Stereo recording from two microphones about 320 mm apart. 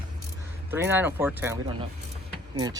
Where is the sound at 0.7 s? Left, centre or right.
Centre.